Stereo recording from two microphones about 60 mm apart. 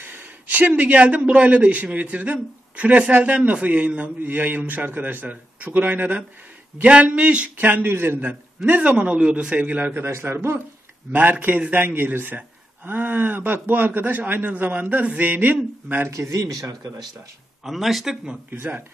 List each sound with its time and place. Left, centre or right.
0.0 s a man's voice: right
6.8 s a man's voice: centre
7.5 s speech: right
8.6 s a man's voice: right
10.0 s a man's voice: right
11.1 s a man's voice: right
16.1 s speech: right
17.6 s speech: centre
18.5 s speech: right